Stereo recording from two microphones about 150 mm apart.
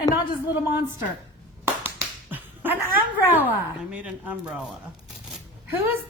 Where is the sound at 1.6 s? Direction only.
10° right (ahead or behind).